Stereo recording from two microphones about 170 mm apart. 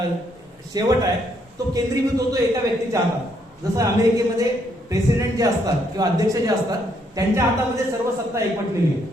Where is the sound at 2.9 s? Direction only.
20° right (ahead or behind).